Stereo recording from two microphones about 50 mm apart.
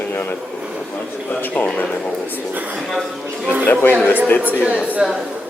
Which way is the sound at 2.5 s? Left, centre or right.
Right.